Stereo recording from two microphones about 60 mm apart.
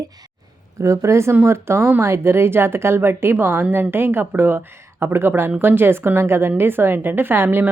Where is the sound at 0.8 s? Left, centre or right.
Right.